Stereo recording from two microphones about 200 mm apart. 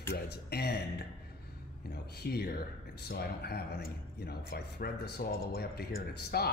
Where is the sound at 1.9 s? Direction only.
50° left (ahead or behind).